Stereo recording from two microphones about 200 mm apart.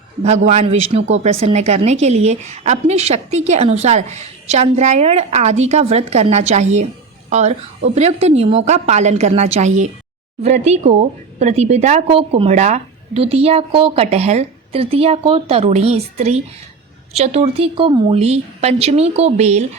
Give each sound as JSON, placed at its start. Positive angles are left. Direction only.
{"t": 0.2, "sound": "a woman's voice", "side_deg": -35}